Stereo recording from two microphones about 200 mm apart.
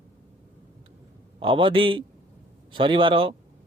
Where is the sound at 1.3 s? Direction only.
25° right (ahead or behind).